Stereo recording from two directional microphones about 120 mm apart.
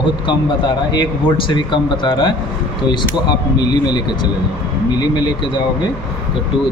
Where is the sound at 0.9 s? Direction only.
40° left (ahead or behind).